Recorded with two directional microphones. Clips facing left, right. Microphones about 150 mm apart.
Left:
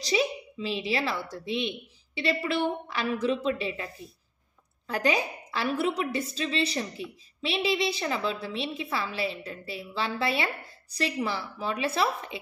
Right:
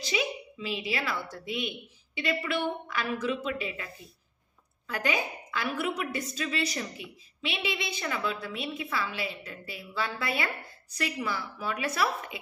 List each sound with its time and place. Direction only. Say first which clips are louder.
0.0 s a woman's voice: left 4 dB; 35° left (ahead or behind)